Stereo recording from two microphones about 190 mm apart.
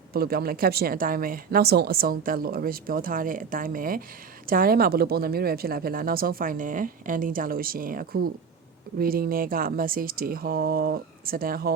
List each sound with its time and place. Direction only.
0.1 s speech: 55° right (ahead or behind)